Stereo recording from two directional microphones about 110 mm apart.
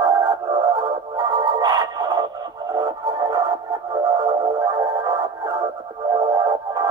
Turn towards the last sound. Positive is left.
turn(degrees=-40)  # may be behind; listen again after turning